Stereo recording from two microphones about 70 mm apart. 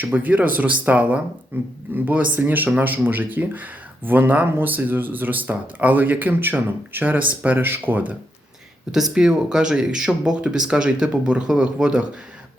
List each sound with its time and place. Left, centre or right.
0.0 s speech: right
8.9 s speech: centre